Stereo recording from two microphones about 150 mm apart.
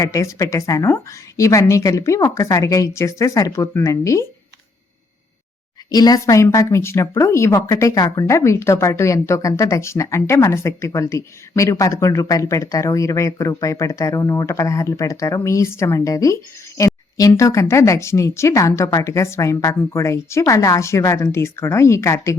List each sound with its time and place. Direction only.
0.0 s a woman's voice: 20° left (ahead or behind)
5.9 s a woman's voice: 25° left (ahead or behind)